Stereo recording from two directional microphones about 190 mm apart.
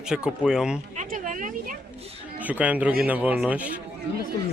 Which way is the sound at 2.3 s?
10° right (ahead or behind).